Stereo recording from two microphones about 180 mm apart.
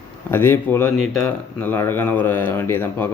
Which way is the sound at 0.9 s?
Centre (ahead or behind).